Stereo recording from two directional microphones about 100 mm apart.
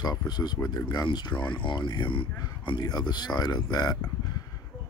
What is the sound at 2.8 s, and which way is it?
Speech, 40° left (ahead or behind).